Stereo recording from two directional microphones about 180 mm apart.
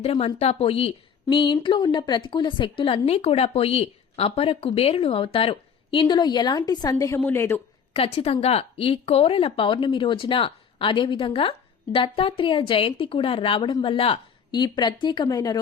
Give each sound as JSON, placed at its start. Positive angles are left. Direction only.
{"t": 0.0, "sound": "a woman's voice", "side_deg": 35}
{"t": 7.9, "sound": "a woman's voice", "side_deg": 35}